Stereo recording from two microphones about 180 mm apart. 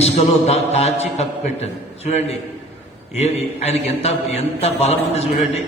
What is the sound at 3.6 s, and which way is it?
A man's voice, 35° left (ahead or behind).